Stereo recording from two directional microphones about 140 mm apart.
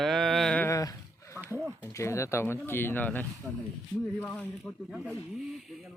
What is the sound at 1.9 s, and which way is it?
Speech, 20° left (ahead or behind).